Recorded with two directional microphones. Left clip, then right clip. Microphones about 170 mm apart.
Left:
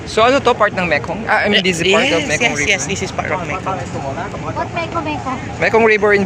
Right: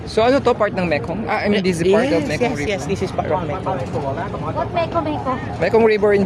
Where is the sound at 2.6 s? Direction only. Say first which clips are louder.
Left 5 dB; 45° right (ahead or behind).